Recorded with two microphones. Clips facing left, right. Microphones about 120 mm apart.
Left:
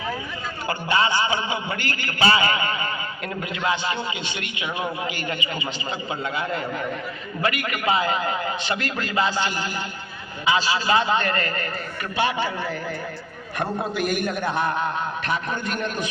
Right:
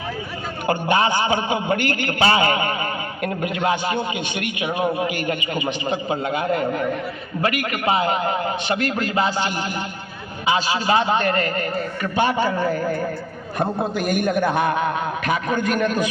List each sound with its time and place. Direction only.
0.7 s a man's voice: 50° right (ahead or behind)
11.4 s a man's voice: 10° right (ahead or behind)
12.1 s a man's voice: 45° right (ahead or behind)